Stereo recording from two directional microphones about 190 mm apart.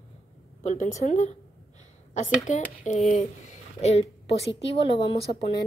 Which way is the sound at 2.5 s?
40° left (ahead or behind).